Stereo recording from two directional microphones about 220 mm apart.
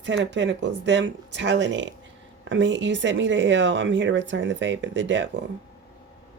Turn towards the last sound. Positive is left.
turn(degrees=-55)  # may be behind; listen again after turning